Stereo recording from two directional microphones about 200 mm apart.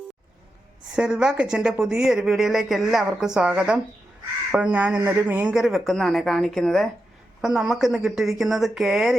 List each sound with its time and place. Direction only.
0.9 s speech: 5° right (ahead or behind)